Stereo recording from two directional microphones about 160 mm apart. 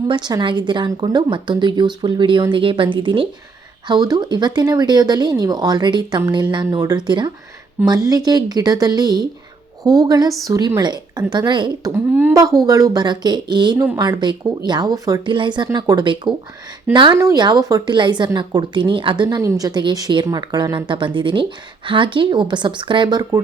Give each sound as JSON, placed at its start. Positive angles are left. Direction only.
{"t": 0.1, "sound": "speech", "side_deg": -25}
{"t": 12.1, "sound": "speech", "side_deg": -10}
{"t": 12.6, "sound": "speech", "side_deg": -20}